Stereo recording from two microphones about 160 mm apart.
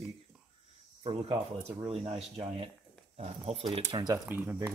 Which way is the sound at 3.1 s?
40° right (ahead or behind).